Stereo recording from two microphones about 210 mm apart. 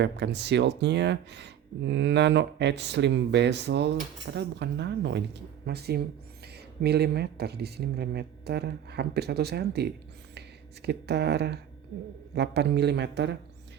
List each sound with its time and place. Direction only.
0.0 s speech: 55° right (ahead or behind)